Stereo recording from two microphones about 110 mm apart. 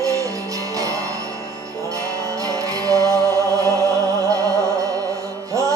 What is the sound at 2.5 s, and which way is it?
Music, 30° right (ahead or behind).